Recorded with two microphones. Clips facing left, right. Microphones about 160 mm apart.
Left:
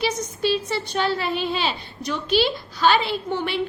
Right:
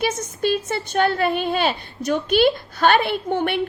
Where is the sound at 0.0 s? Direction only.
50° right (ahead or behind).